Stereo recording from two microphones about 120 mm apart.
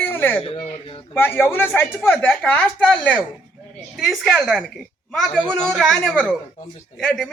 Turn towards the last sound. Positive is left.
turn(degrees=5)  # may be behind; listen again after turning